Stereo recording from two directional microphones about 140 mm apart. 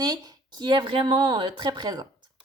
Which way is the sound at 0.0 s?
30° right (ahead or behind).